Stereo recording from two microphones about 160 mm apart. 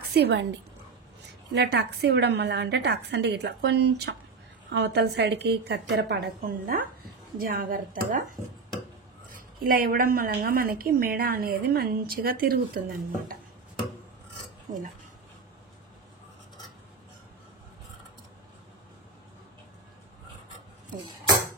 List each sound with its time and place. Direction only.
0.0 s a woman's voice: 90° right; by 13.4 s 65° right (ahead or behind)